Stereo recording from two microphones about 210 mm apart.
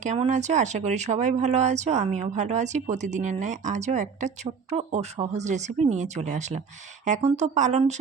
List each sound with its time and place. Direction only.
0.0 s speech: 35° right (ahead or behind)